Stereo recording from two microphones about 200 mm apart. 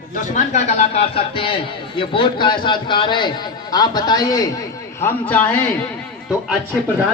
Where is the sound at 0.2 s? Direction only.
35° left (ahead or behind); by 5.5 s 10° left (ahead or behind).